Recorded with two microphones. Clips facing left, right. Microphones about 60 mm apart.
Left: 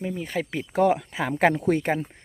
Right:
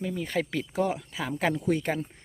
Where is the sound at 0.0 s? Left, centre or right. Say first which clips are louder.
Left 1 dB; centre.